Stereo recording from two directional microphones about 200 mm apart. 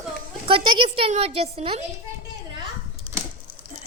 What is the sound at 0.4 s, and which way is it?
A woman's voice, 25° right (ahead or behind).